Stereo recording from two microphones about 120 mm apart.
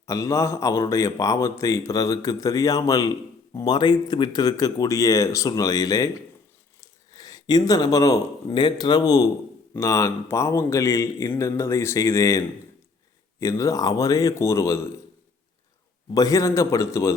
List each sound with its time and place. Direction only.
0.0 s speech: 25° left (ahead or behind)
13.4 s speech: 25° left (ahead or behind)
16.1 s speech: 30° left (ahead or behind)